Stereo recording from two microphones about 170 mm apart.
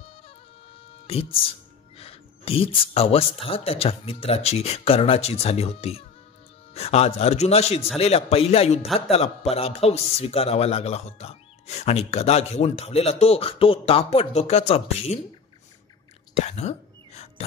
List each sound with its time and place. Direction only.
2.0 s a man's voice: 35° left (ahead or behind)
8.8 s a man's voice: centre (ahead or behind)
9.1 s a man's voice: 35° left (ahead or behind)
16.3 s whispering: 40° left (ahead or behind)